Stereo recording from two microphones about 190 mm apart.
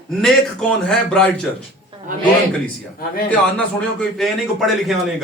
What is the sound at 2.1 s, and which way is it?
Speech, 45° right (ahead or behind).